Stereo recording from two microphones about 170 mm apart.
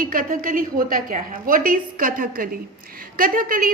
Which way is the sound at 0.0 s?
55° right (ahead or behind).